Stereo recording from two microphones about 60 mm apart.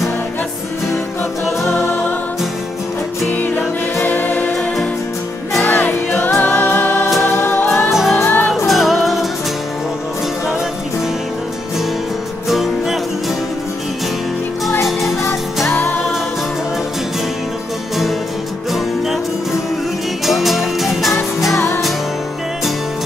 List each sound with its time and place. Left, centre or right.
3.3 s music: left
7.9 s music: centre
8.2 s music: left
8.6 s music: centre
12.4 s music: centre
14.9 s music: centre
15.7 s music: left
20.2 s music: centre
21.5 s music: left